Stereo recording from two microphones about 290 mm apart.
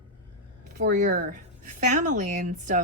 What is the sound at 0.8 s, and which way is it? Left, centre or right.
A woman's voice, right.